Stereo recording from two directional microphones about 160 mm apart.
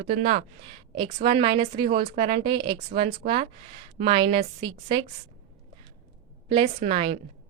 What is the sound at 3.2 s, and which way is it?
Speech, 45° right (ahead or behind).